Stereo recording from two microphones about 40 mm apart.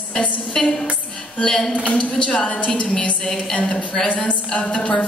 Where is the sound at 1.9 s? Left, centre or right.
Left.